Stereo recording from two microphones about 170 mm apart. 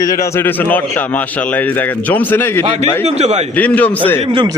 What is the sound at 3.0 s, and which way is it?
Speech, 40° right (ahead or behind).